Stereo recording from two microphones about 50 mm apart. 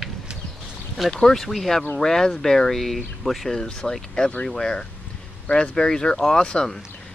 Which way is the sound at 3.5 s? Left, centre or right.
Centre.